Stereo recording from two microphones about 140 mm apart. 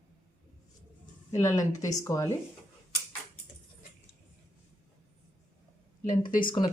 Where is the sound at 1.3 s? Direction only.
20° left (ahead or behind).